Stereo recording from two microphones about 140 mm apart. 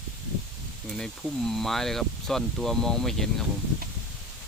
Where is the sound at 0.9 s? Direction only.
5° left (ahead or behind).